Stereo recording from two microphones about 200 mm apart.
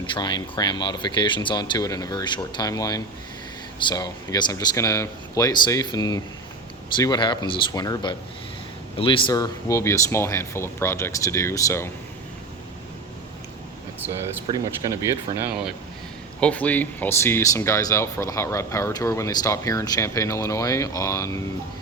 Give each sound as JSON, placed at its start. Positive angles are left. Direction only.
{"t": 0.0, "sound": "speech", "side_deg": 25}
{"t": 14.8, "sound": "speech", "side_deg": -20}
{"t": 16.4, "sound": "speech", "side_deg": 5}